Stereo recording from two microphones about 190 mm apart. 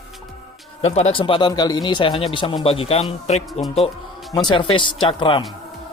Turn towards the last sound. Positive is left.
turn(degrees=25)  # may be behind; listen again after turning